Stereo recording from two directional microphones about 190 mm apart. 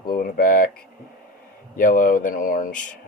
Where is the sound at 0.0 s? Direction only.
50° left (ahead or behind).